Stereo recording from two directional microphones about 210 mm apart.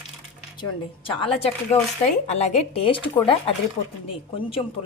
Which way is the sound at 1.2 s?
30° left (ahead or behind).